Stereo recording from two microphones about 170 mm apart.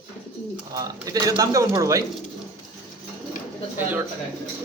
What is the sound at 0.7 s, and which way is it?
Speech, 20° right (ahead or behind).